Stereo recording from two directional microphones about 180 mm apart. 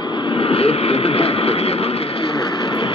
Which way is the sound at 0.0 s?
30° left (ahead or behind).